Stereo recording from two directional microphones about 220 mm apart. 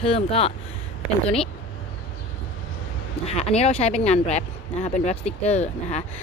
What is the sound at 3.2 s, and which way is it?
Speech, 30° left (ahead or behind).